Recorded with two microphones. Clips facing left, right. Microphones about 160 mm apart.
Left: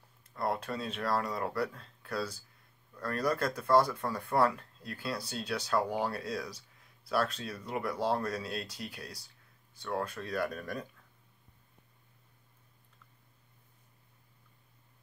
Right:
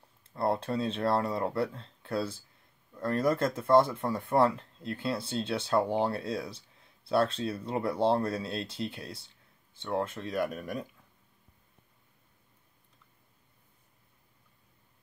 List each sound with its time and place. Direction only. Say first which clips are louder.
0.3 s speech: right 4 dB; 30° right (ahead or behind)